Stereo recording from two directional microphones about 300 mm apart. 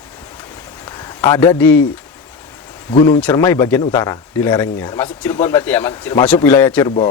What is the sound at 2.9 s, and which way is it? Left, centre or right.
Speech, centre.